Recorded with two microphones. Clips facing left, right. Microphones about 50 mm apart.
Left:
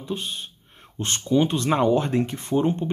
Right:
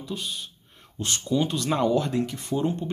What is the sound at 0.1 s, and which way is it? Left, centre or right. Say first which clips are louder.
Speech: left 4 dB; left.